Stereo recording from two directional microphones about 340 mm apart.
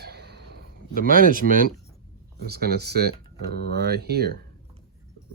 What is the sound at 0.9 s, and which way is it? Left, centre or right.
Speech, right.